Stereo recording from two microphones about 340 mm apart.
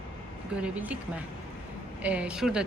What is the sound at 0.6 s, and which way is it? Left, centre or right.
Speech, centre.